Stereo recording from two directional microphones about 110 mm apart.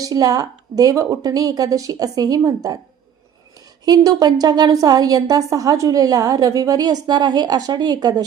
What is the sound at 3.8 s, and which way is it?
A woman's voice, 35° right (ahead or behind).